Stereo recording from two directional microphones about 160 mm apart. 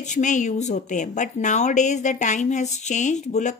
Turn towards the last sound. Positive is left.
turn(degrees=45)  # may be behind; listen again after turning